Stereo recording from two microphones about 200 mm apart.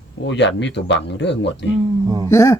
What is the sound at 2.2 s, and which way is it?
Speech, 15° left (ahead or behind).